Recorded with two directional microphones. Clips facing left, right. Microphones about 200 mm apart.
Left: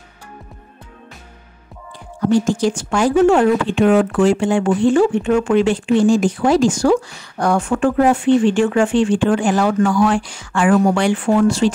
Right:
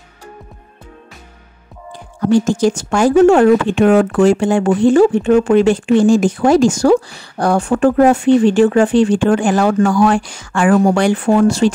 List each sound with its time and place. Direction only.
2.4 s speech: 45° right (ahead or behind)